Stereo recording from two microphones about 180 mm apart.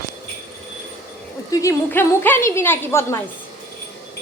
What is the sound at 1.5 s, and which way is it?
A woman's voice, 15° left (ahead or behind).